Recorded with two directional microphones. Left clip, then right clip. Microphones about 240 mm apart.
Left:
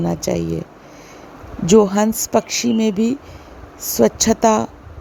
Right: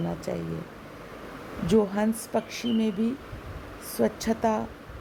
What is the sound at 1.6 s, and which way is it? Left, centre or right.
Speech, left.